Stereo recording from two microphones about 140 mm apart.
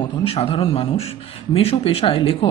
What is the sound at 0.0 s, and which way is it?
Speech, 40° left (ahead or behind).